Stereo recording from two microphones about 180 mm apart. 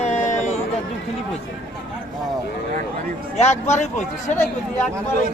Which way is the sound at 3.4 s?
40° left (ahead or behind).